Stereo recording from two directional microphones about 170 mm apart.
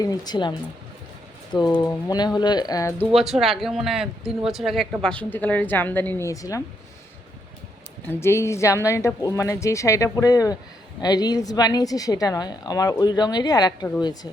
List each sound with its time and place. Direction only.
0.0 s a woman's voice: 25° left (ahead or behind)
1.8 s a woman's voice: 20° left (ahead or behind)
3.2 s a woman's voice: centre (ahead or behind); by 6.6 s 20° left (ahead or behind)
8.2 s a woman's voice: 15° left (ahead or behind)